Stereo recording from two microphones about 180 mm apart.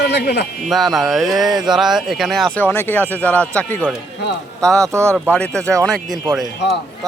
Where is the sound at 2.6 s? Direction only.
10° left (ahead or behind).